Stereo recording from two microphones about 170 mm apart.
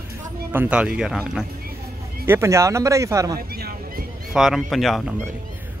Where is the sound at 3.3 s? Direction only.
65° right (ahead or behind).